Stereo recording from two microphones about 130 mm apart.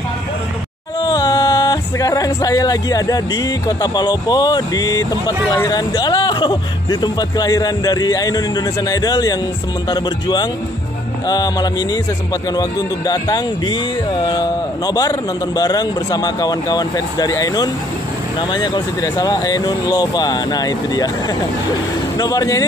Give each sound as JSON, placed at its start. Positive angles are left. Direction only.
{"t": 1.0, "sound": "speech", "side_deg": 30}
{"t": 19.1, "sound": "speech", "side_deg": 30}
{"t": 22.2, "sound": "speech", "side_deg": 30}